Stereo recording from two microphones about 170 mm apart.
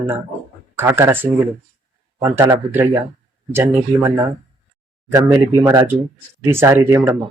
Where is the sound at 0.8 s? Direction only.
15° right (ahead or behind).